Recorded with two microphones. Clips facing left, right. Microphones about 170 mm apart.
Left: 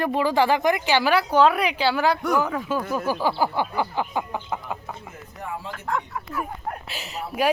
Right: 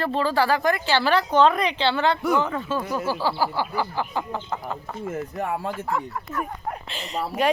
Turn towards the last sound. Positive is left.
turn(degrees=5)  # may be behind; listen again after turning